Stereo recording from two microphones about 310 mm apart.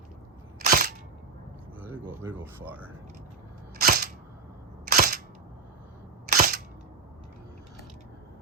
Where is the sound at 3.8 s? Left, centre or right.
Right.